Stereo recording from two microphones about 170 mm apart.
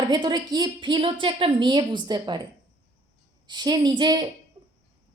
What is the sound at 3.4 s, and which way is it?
Speech, 25° right (ahead or behind).